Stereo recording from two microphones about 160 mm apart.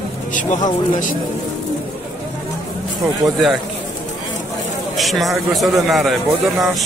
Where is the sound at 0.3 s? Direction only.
55° left (ahead or behind).